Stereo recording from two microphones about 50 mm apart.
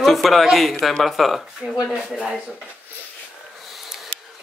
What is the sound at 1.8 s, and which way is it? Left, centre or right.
Speech, centre.